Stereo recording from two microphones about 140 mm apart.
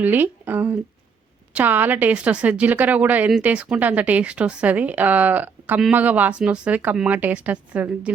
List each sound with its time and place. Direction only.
0.0 s speech: 15° right (ahead or behind)